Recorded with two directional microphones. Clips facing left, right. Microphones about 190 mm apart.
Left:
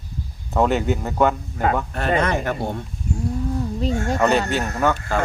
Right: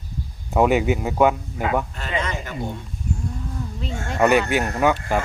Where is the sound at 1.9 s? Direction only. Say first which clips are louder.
Left 7 dB; 55° left (ahead or behind).